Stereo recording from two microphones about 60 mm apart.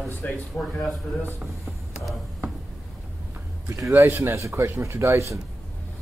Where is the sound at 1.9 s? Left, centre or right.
Centre.